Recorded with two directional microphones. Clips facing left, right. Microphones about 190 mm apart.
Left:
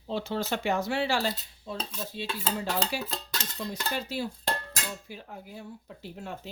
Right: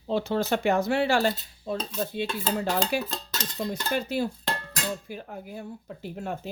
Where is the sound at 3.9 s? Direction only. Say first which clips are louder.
Right 8 dB; 55° right (ahead or behind).